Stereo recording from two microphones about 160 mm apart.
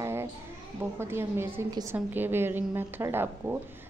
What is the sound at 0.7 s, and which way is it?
A woman's voice, 15° right (ahead or behind).